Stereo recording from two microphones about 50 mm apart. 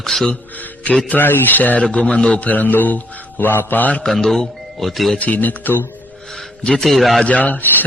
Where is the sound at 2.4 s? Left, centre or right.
Left.